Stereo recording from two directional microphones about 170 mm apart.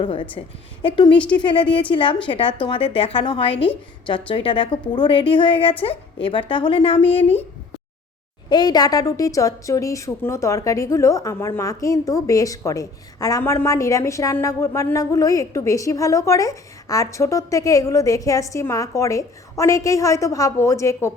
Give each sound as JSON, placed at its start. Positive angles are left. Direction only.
{"t": 0.0, "sound": "a woman's voice", "side_deg": 30}
{"t": 8.4, "sound": "a woman's voice", "side_deg": 25}